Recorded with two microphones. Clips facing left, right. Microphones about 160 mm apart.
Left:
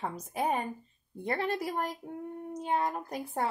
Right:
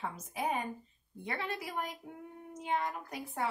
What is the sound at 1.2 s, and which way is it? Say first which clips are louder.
Speech: left 7 dB; 40° left (ahead or behind).